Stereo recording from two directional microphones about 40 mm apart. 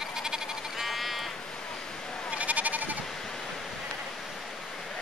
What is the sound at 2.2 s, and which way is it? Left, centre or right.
Sheep, right.